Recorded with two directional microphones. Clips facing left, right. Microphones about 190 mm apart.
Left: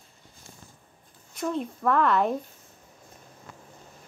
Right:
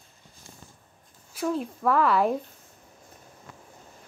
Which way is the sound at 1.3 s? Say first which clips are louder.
Right 1 dB; 5° right (ahead or behind).